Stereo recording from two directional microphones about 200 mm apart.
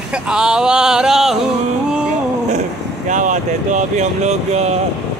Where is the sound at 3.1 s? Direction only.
40° right (ahead or behind).